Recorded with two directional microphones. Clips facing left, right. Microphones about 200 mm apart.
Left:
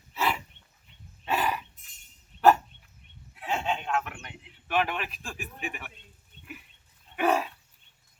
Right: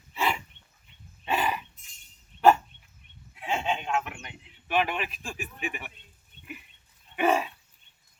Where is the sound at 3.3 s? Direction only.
Centre (ahead or behind).